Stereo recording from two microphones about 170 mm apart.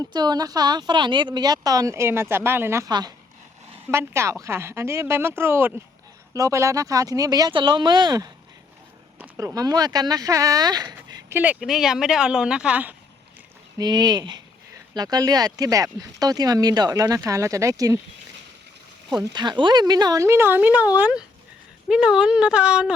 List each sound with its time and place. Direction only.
0.0 s a woman's voice: 25° right (ahead or behind)
9.1 s a sound: 10° right (ahead or behind)
9.6 s a woman's voice: 20° right (ahead or behind)
11.1 s speech: 10° right (ahead or behind)
13.7 s a woman's voice: 25° right (ahead or behind)
19.2 s speech: 25° right (ahead or behind); by 23.0 s 5° right (ahead or behind)